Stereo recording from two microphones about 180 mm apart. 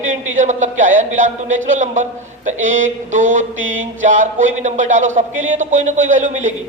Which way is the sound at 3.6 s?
90° right.